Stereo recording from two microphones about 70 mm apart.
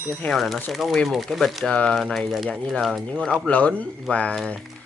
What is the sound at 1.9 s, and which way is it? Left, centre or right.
Speech, centre.